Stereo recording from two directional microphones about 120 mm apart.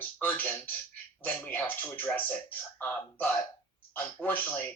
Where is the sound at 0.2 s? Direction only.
15° left (ahead or behind).